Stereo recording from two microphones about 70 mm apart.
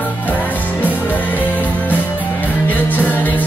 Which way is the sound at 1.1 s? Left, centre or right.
Left.